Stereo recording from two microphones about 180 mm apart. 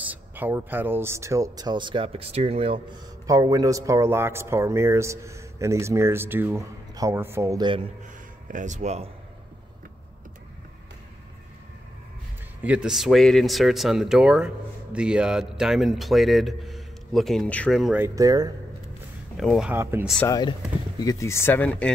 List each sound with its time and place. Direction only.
0.0 s speech: 10° right (ahead or behind); by 3.0 s 30° right (ahead or behind)
3.3 s speech: 20° right (ahead or behind)
8.5 s speech: 45° right (ahead or behind)
12.6 s speech: 5° right (ahead or behind)
17.9 s speech: 15° right (ahead or behind)
19.3 s speech: centre (ahead or behind)
19.7 s speech: 10° right (ahead or behind)
20.2 s speech: 20° left (ahead or behind)